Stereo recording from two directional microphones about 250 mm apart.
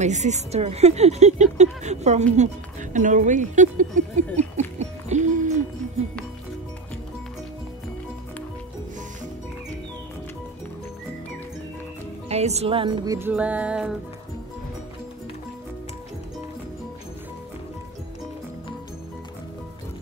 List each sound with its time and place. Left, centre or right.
0.0 s speech: right
4.4 s music: right
12.3 s speech: right; by 13.9 s centre